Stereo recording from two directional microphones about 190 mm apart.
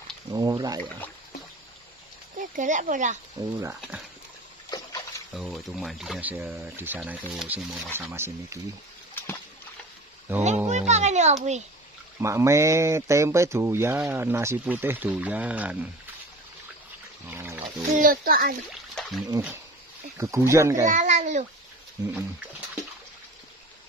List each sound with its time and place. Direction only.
0.3 s a sound: 20° right (ahead or behind)
2.3 s speech: 40° right (ahead or behind)
3.3 s speech: 20° right (ahead or behind)
4.6 s water: 20° left (ahead or behind)
5.3 s speech: centre (ahead or behind)
10.3 s speech: 10° right (ahead or behind)
10.7 s a child's voice: 35° right (ahead or behind)
12.2 s speech: 15° right (ahead or behind)
17.3 s wild animals: 10° right (ahead or behind)
17.9 s a child's voice: 45° right (ahead or behind)
18.9 s a sound: centre (ahead or behind)
20.2 s speech: 15° right (ahead or behind)
20.9 s babbling: 40° right (ahead or behind)